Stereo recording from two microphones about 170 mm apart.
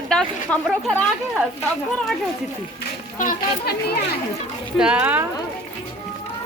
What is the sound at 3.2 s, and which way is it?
Speech, 60° left (ahead or behind).